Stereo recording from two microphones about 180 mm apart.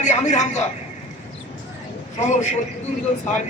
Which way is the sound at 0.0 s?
40° left (ahead or behind).